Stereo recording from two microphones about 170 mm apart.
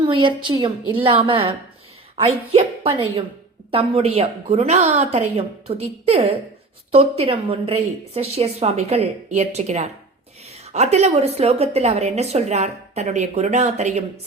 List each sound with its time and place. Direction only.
0.0 s a woman's voice: 30° right (ahead or behind)